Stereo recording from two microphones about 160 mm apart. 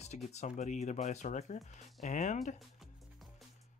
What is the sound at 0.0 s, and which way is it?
Speech, 45° left (ahead or behind).